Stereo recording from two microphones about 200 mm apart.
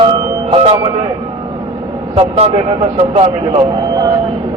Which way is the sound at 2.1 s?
30° right (ahead or behind).